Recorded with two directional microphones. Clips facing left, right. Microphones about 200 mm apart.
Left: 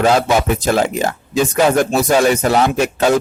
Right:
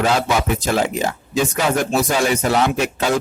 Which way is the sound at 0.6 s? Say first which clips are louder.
Left 3 dB; 50° left (ahead or behind).